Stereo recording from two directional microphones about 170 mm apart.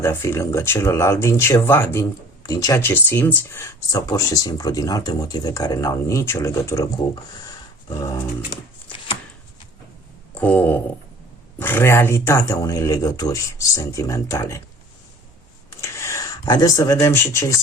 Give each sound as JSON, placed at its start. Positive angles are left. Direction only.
{"t": 0.0, "sound": "speech", "side_deg": 15}
{"t": 7.9, "sound": "dog", "side_deg": 20}
{"t": 10.3, "sound": "a sound", "side_deg": 10}
{"t": 11.6, "sound": "speech", "side_deg": 15}
{"t": 15.8, "sound": "speech", "side_deg": 15}